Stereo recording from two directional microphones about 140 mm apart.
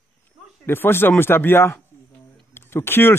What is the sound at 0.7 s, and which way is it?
Speech, 15° left (ahead or behind).